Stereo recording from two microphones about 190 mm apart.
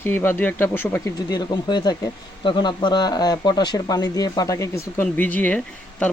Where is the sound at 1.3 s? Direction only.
20° left (ahead or behind).